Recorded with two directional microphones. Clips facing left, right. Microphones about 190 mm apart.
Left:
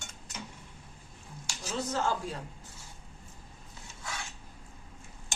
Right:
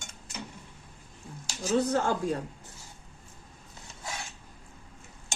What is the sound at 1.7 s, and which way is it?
Speech, 55° right (ahead or behind).